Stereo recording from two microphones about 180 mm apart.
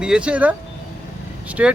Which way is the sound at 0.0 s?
5° right (ahead or behind).